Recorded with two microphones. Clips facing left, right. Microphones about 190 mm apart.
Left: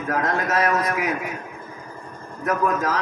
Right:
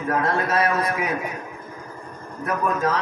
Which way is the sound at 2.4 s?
30° right (ahead or behind).